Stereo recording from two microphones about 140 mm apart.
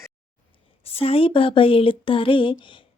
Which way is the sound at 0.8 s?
45° left (ahead or behind).